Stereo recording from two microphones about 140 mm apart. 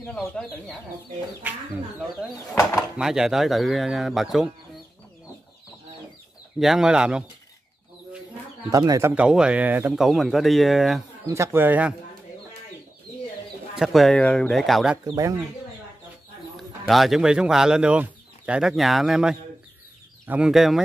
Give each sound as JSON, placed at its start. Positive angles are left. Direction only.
{"t": 0.0, "sound": "speech", "side_deg": 5}
{"t": 3.0, "sound": "speech", "side_deg": -5}
{"t": 6.6, "sound": "speech", "side_deg": -5}
{"t": 8.6, "sound": "speech", "side_deg": -25}
{"t": 9.1, "sound": "speech", "side_deg": -5}
{"t": 9.9, "sound": "speech", "side_deg": 0}
{"t": 11.2, "sound": "speech", "side_deg": -20}
{"t": 13.7, "sound": "speech", "side_deg": 0}
{"t": 15.0, "sound": "speech", "side_deg": -25}
{"t": 16.5, "sound": "speech", "side_deg": 0}